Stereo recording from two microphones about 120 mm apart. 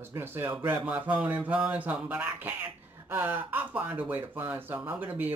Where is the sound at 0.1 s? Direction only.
20° right (ahead or behind).